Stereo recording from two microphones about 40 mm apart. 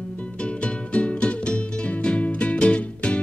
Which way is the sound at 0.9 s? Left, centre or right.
Left.